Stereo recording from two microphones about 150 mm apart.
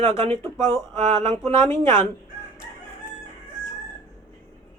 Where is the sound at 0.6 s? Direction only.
15° left (ahead or behind).